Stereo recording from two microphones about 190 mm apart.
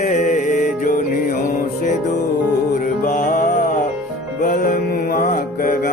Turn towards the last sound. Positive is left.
turn(degrees=45)  # may be behind; listen again after turning